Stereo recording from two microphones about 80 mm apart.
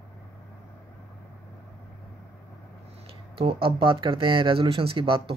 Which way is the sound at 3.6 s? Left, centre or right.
Right.